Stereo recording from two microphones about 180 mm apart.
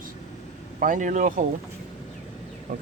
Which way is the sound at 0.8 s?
45° right (ahead or behind).